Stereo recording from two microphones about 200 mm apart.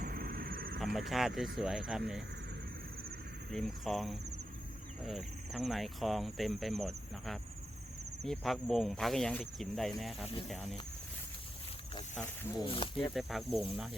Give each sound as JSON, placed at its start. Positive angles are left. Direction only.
{"t": 0.0, "sound": "a sound", "side_deg": -45}
{"t": 0.9, "sound": "speech", "side_deg": 0}
{"t": 3.5, "sound": "speech", "side_deg": 0}
{"t": 12.6, "sound": "speech", "side_deg": 25}
{"t": 13.1, "sound": "speech", "side_deg": 0}